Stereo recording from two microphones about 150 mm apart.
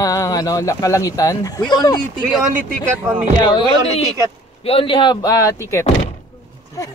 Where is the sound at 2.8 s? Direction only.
10° right (ahead or behind).